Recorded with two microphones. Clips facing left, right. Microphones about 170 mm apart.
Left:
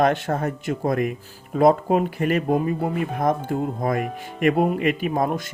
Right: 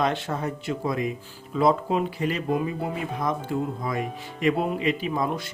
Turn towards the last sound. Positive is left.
turn(degrees=50)  # may be behind; listen again after turning